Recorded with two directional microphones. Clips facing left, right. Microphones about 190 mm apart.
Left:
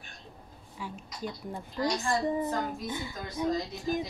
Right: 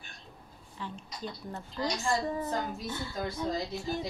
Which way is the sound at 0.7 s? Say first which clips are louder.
Left 1 dB; 10° left (ahead or behind).